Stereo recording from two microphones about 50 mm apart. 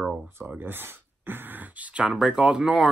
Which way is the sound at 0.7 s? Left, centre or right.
Right.